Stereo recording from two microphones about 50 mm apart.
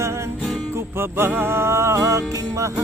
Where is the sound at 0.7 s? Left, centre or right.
Right.